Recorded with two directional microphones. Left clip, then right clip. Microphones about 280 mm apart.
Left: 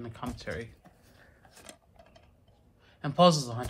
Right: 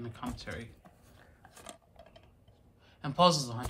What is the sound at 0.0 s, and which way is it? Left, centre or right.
Speech, centre.